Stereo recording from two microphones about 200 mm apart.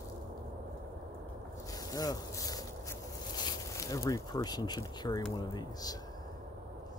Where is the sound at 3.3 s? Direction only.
20° left (ahead or behind).